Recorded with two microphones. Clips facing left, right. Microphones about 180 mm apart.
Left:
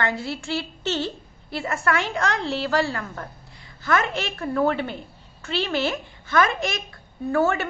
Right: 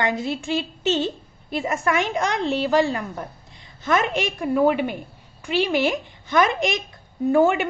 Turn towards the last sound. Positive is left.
turn(degrees=-15)  # may be behind; listen again after turning